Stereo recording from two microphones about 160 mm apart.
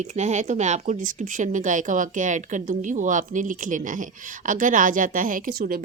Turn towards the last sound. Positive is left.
turn(degrees=-65)  # may be behind; listen again after turning